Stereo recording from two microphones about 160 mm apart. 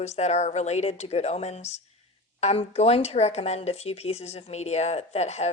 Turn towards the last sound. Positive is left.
turn(degrees=45)  # may be behind; listen again after turning